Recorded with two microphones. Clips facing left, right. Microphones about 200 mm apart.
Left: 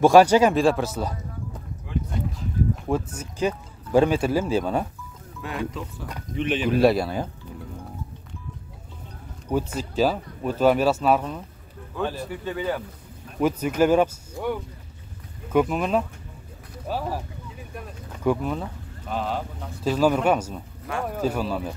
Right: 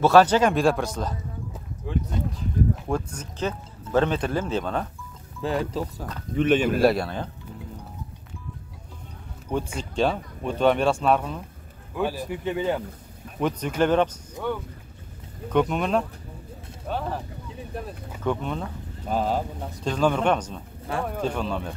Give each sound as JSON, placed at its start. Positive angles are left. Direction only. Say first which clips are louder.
{"t": 0.0, "sound": "speech", "louder": "left 2 dB", "side_deg": 10}
{"t": 2.9, "sound": "speech", "louder": "left 2 dB", "side_deg": 5}
{"t": 5.4, "sound": "speech", "louder": "right 4 dB", "side_deg": -30}
{"t": 6.3, "sound": "speech", "louder": "right 4 dB", "side_deg": -50}
{"t": 6.7, "sound": "speech", "louder": "left 2 dB", "side_deg": 0}
{"t": 9.8, "sound": "speech", "louder": "even", "side_deg": 5}
{"t": 11.9, "sound": "speech", "louder": "right 1 dB", "side_deg": -10}
{"t": 13.4, "sound": "speech", "louder": "left 3 dB", "side_deg": 5}
{"t": 18.2, "sound": "speech", "louder": "left 3 dB", "side_deg": 5}
{"t": 19.0, "sound": "speech", "louder": "right 3 dB", "side_deg": -40}
{"t": 19.8, "sound": "speech", "louder": "left 2 dB", "side_deg": 5}